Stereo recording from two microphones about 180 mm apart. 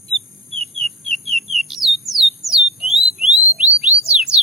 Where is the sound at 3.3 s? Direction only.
35° right (ahead or behind).